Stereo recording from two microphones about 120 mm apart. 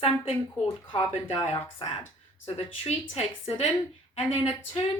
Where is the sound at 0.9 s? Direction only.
45° left (ahead or behind).